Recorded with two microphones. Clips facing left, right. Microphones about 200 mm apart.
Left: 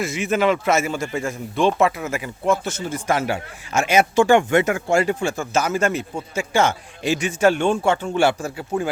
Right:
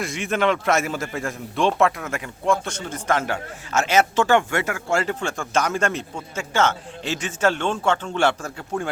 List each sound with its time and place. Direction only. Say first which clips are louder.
0.0 s a man's voice: left 3 dB; 5° left (ahead or behind)